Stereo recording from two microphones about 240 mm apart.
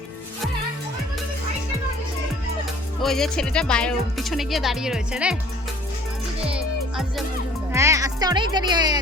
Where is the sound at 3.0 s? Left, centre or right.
Centre.